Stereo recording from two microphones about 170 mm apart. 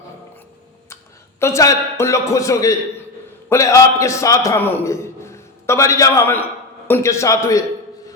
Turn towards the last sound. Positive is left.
turn(degrees=15)  # may be behind; listen again after turning